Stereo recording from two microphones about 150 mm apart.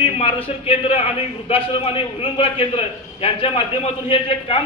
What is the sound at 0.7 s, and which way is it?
A man's voice, 40° left (ahead or behind).